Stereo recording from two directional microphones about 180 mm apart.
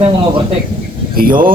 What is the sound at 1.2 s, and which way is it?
Speech, 50° right (ahead or behind).